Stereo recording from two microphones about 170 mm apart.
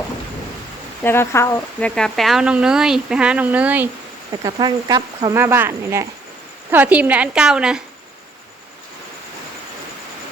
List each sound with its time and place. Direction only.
1.0 s speech: 15° left (ahead or behind)
2.0 s speech: centre (ahead or behind)
4.4 s a woman's voice: 25° right (ahead or behind); by 7.8 s 5° right (ahead or behind)